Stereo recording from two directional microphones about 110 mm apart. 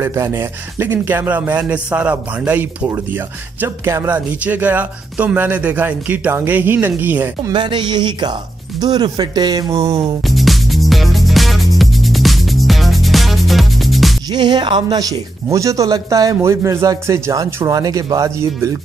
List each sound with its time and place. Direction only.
0.0 s speech: 25° right (ahead or behind)
7.5 s a sound: 45° right (ahead or behind)
8.8 s speech: 40° right (ahead or behind)
10.3 s music: centre (ahead or behind)
14.3 s speech: 40° right (ahead or behind); by 18.7 s 25° right (ahead or behind)